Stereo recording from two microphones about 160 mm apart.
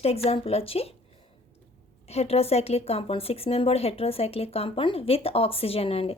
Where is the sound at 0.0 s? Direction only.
40° left (ahead or behind).